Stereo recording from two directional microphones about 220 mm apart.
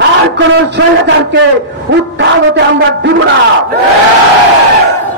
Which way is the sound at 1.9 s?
50° right (ahead or behind).